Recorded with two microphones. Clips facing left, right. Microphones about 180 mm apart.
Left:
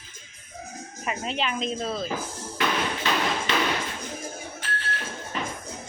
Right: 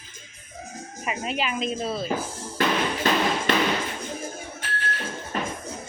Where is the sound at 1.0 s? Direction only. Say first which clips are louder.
Right 1 dB; 5° right (ahead or behind).